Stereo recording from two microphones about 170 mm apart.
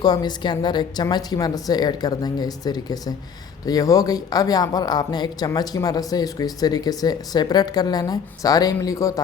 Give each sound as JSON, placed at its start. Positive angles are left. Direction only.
{"t": 0.0, "sound": "speech", "side_deg": 25}